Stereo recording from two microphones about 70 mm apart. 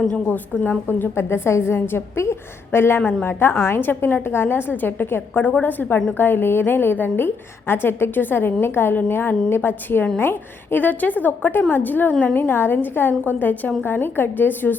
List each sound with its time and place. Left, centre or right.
0.6 s a woman's voice: left